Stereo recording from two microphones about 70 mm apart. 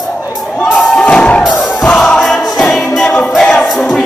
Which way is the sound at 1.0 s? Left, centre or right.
Centre.